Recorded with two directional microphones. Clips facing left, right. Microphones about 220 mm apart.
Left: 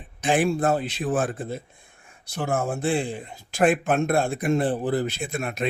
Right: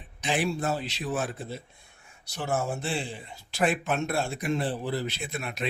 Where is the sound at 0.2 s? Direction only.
50° left (ahead or behind).